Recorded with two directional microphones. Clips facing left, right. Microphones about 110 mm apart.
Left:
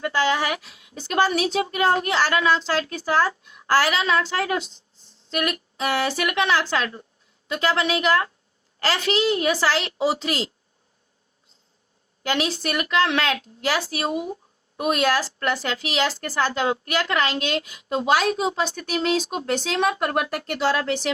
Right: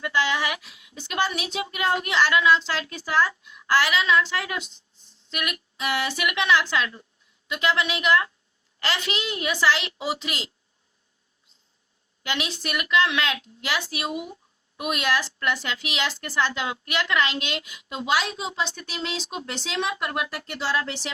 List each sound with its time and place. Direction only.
0.0 s a woman's voice: 40° left (ahead or behind)
12.2 s a woman's voice: 40° left (ahead or behind)